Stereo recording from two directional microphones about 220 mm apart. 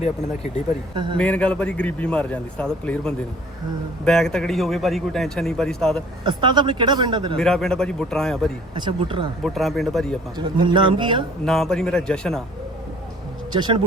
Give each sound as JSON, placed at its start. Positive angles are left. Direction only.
{"t": 0.9, "sound": "speech", "side_deg": -20}
{"t": 1.2, "sound": "a man's voice", "side_deg": 5}
{"t": 6.2, "sound": "speech", "side_deg": -20}
{"t": 7.3, "sound": "a man's voice", "side_deg": 0}
{"t": 8.7, "sound": "speech", "side_deg": -20}
{"t": 9.4, "sound": "a man's voice", "side_deg": 0}
{"t": 10.3, "sound": "speech", "side_deg": -20}
{"t": 11.4, "sound": "a man's voice", "side_deg": 0}
{"t": 13.5, "sound": "speech", "side_deg": -20}